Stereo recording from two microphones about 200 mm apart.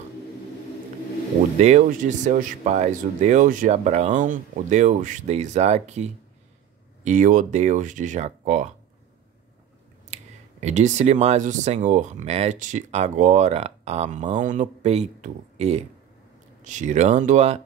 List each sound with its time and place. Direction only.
1.6 s speech: 35° right (ahead or behind)
10.1 s speech: 35° right (ahead or behind)